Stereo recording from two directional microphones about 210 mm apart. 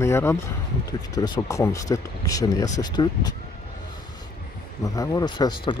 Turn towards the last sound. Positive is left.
turn(degrees=20)  # may be behind; listen again after turning